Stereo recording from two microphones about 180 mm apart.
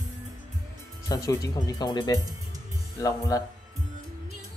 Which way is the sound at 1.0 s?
20° left (ahead or behind).